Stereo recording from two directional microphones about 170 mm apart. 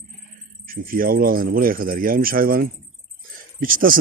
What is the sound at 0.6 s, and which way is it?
Speech, 55° right (ahead or behind).